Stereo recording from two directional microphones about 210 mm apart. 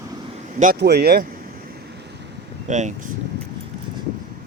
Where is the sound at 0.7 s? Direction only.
50° right (ahead or behind).